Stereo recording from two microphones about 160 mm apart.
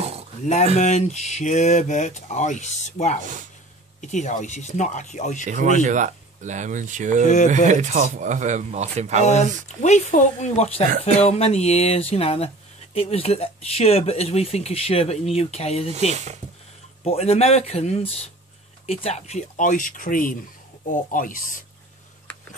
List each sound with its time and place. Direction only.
0.7 s speech: 45° left (ahead or behind)
5.4 s speech: 50° right (ahead or behind)
9.2 s speech: 45° left (ahead or behind)
16.1 s speech: 45° right (ahead or behind)
17.0 s speech: 40° left (ahead or behind); by 21.5 s 60° left (ahead or behind)